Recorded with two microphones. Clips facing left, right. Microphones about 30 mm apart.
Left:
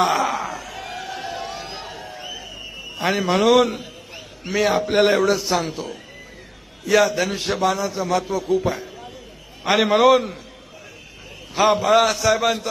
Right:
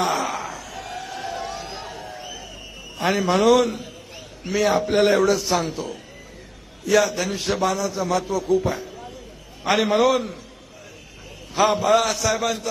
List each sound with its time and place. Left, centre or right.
0.0 s a sound: centre
3.0 s a man's voice: centre
4.1 s a sound: centre
4.9 s a man's voice: centre
9.7 s a man's voice: left
11.7 s a man's voice: centre
12.4 s a man's voice: left